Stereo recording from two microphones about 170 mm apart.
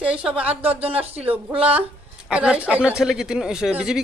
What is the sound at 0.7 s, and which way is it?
Speech, 35° right (ahead or behind).